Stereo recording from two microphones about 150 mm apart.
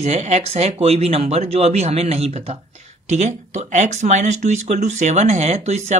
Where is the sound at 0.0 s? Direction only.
50° right (ahead or behind).